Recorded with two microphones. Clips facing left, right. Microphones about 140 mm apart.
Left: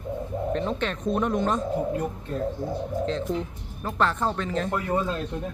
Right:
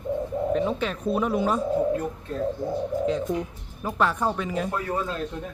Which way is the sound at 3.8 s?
10° right (ahead or behind).